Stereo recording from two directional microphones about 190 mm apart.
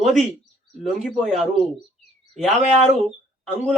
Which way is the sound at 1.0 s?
Centre (ahead or behind).